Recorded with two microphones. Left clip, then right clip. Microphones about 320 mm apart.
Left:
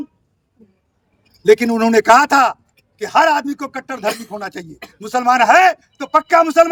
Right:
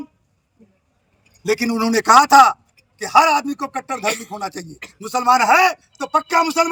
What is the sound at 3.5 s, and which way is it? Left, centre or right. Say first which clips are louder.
Speech: even; centre.